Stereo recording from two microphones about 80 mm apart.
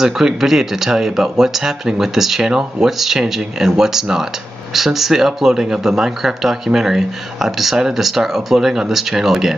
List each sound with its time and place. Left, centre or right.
0.0 s speech: centre